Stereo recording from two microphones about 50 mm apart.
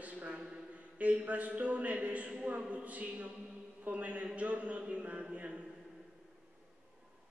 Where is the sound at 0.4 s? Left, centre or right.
Centre.